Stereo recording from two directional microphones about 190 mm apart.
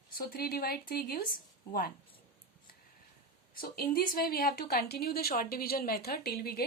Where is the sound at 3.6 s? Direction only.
50° left (ahead or behind).